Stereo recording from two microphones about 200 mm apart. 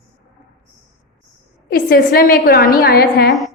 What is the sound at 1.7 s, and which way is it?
A woman's voice, 50° left (ahead or behind).